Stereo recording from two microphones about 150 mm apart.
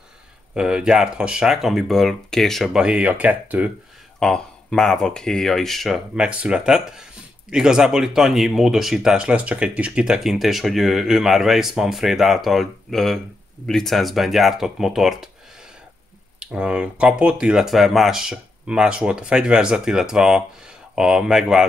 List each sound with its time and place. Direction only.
0.6 s speech: 5° right (ahead or behind)
4.2 s speech: 5° left (ahead or behind)
16.3 s speech: 5° right (ahead or behind)